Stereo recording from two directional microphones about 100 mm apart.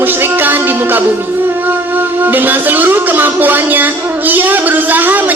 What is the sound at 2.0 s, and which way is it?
A woman's voice, 20° right (ahead or behind).